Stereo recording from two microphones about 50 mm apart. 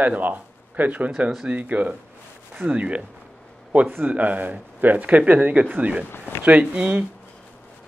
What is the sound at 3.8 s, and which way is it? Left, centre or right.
Speech, right.